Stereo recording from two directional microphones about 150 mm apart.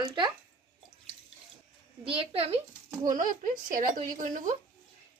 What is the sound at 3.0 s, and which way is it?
Speech, 60° right (ahead or behind).